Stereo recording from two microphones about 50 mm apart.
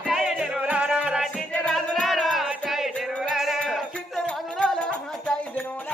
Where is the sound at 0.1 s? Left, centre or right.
Centre.